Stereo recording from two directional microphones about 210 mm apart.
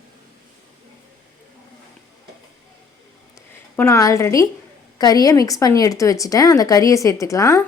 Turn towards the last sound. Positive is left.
turn(degrees=15)  # may be behind; listen again after turning